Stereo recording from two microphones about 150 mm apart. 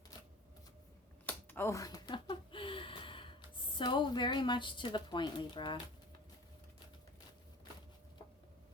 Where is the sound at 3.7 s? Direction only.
30° left (ahead or behind).